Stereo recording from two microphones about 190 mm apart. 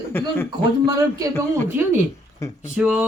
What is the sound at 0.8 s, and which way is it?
Speech, 20° right (ahead or behind).